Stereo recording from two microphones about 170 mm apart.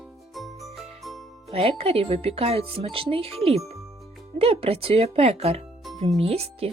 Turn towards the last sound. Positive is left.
turn(degrees=-35)  # may be behind; listen again after turning